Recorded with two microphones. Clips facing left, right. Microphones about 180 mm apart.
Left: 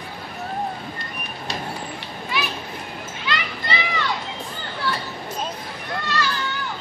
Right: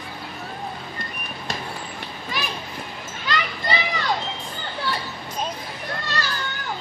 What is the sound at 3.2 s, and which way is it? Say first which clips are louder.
Children playing: right 2 dB; 40° right (ahead or behind).